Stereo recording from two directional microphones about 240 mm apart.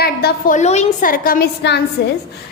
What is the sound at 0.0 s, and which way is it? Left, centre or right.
A woman's voice, left.